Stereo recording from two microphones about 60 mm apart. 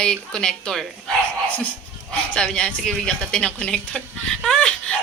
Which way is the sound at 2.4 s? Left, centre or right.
Centre.